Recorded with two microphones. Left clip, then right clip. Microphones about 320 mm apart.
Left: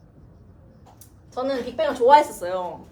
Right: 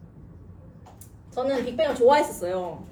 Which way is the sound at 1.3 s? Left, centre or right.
Centre.